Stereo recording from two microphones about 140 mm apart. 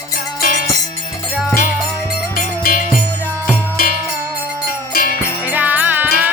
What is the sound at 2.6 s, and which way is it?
Music, 75° left (ahead or behind).